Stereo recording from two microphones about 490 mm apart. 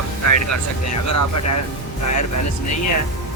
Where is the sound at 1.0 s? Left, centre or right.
Left.